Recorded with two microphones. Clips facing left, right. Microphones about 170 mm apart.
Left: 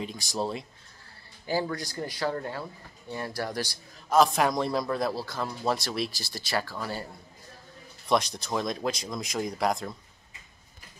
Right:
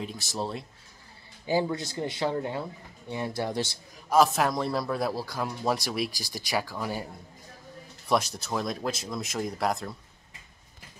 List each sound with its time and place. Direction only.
0.0 s speech: centre (ahead or behind)
1.4 s speech: 20° right (ahead or behind)
4.1 s a man's voice: 5° right (ahead or behind)
8.1 s speech: 5° right (ahead or behind)